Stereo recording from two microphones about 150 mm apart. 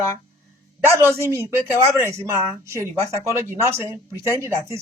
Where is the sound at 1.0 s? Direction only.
15° right (ahead or behind).